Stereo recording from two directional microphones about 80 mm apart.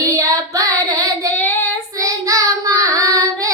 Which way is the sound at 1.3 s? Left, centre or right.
Left.